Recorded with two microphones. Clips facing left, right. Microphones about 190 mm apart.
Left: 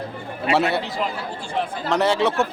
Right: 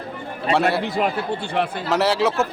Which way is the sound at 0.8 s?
60° right (ahead or behind).